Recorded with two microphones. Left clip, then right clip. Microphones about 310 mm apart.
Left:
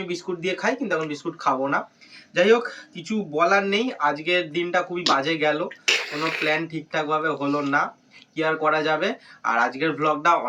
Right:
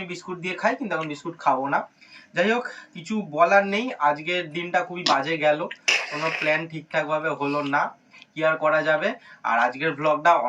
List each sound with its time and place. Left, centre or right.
0.1 s speech: centre